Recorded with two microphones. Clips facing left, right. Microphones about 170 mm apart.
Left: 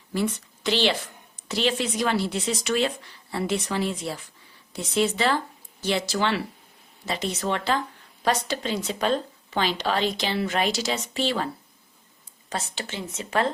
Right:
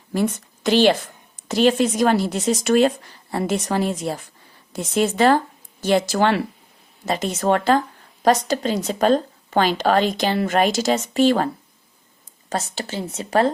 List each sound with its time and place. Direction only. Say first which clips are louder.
0.1 s a woman's voice: right 5 dB; 45° right (ahead or behind)
12.5 s speech: right 6 dB; 40° right (ahead or behind)